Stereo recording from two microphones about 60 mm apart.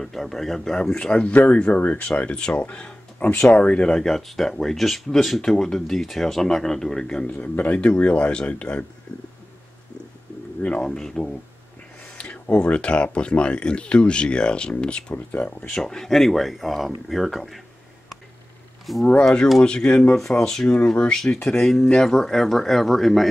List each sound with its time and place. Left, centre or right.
0.0 s speech: centre
2.6 s music: left
3.4 s speech: left
7.5 s speech: left
10.8 s speech: centre
12.2 s speech: left; by 17.6 s centre
18.9 s speech: centre
19.2 s speech: centre